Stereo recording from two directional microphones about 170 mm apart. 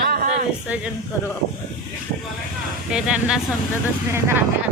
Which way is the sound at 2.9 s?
5° right (ahead or behind).